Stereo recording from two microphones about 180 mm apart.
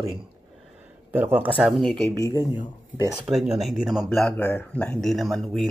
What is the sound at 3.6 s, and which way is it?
Speech, centre (ahead or behind).